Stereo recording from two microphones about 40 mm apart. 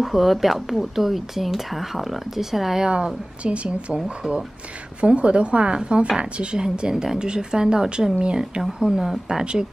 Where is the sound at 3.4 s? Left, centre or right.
Right.